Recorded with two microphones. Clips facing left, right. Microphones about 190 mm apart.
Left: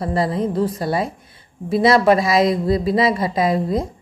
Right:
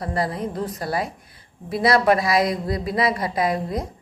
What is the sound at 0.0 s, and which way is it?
Speech, 25° left (ahead or behind).